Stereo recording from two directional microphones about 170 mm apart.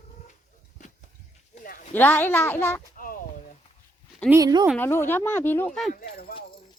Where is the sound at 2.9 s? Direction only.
55° left (ahead or behind).